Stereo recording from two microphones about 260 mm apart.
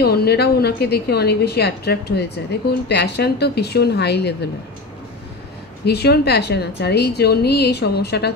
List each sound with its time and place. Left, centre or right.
0.0 s a woman's voice: left
5.9 s a woman's voice: left